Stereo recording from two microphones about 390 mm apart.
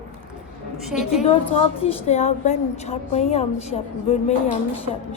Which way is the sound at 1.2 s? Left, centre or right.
Centre.